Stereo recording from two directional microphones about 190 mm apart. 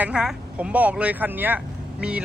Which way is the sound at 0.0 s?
5° right (ahead or behind).